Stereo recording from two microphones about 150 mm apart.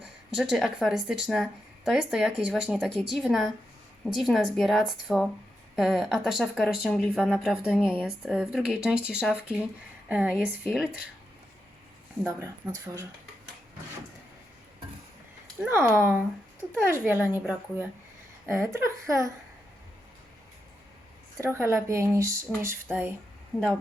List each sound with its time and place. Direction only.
0.0 s speech: centre (ahead or behind)
12.2 s speech: 20° right (ahead or behind)
15.5 s speech: 15° right (ahead or behind)
21.3 s speech: 20° right (ahead or behind)